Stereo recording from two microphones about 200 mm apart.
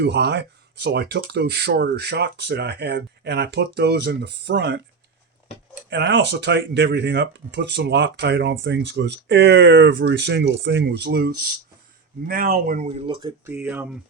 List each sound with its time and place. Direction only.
0.0 s speech: 55° right (ahead or behind)
5.9 s speech: 60° right (ahead or behind)
12.3 s speech: 45° right (ahead or behind); by 13.3 s 25° right (ahead or behind)
13.4 s speech: 10° right (ahead or behind)